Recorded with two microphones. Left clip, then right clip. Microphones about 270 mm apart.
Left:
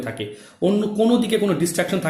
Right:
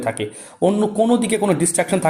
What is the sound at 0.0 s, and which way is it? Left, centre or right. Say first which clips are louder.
Speech: right 6 dB; centre.